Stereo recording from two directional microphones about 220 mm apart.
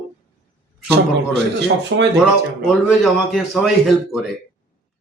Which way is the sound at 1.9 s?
55° right (ahead or behind).